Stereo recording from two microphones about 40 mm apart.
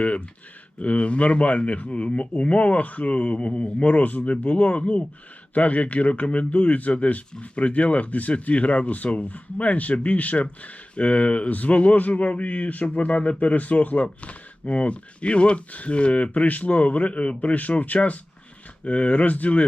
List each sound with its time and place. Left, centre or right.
0.0 s speech: left